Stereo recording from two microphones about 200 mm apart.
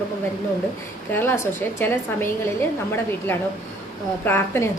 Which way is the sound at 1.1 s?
10° left (ahead or behind).